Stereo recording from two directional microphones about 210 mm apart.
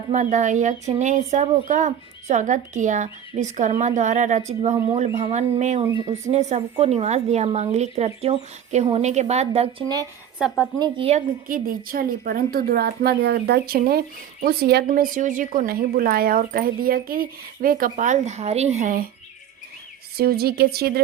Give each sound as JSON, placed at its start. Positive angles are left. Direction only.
{"t": 0.1, "sound": "speech", "side_deg": -35}
{"t": 5.8, "sound": "speech", "side_deg": -20}
{"t": 6.1, "sound": "speech", "side_deg": -30}
{"t": 10.3, "sound": "speech", "side_deg": 5}
{"t": 10.8, "sound": "speech", "side_deg": -20}
{"t": 11.4, "sound": "a woman's voice", "side_deg": -40}
{"t": 20.1, "sound": "a woman's voice", "side_deg": -50}